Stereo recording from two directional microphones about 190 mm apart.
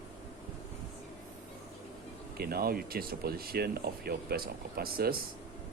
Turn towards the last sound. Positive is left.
turn(degrees=-50)  # may be behind; listen again after turning